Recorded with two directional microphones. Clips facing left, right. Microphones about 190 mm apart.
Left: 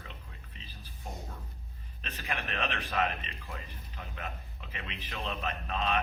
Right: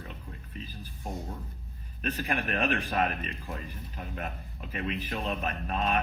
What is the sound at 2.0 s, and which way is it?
A man's voice, 50° right (ahead or behind).